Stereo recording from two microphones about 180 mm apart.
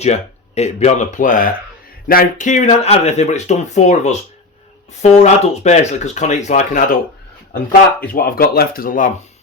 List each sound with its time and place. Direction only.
0.0 s speech: 35° left (ahead or behind)
8.0 s speech: 55° left (ahead or behind)